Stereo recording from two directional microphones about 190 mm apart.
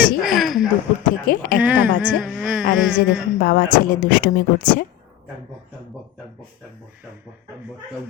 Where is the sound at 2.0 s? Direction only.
5° left (ahead or behind).